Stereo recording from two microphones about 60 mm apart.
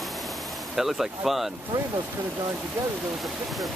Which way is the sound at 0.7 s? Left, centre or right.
Centre.